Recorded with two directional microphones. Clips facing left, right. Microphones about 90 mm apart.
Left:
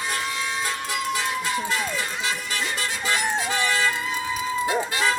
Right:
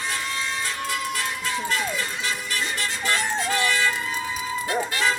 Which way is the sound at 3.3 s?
10° left (ahead or behind).